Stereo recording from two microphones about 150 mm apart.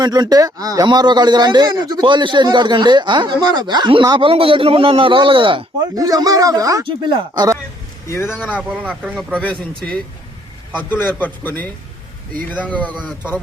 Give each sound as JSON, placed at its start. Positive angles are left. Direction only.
{"t": 0.0, "sound": "speech", "side_deg": -25}
{"t": 6.0, "sound": "speech", "side_deg": -25}
{"t": 6.8, "sound": "speech", "side_deg": -35}
{"t": 8.0, "sound": "speech", "side_deg": 20}
{"t": 8.5, "sound": "speech", "side_deg": -10}
{"t": 10.8, "sound": "a man's voice", "side_deg": 10}